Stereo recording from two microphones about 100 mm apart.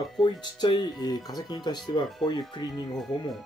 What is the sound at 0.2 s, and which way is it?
Speech, 45° left (ahead or behind).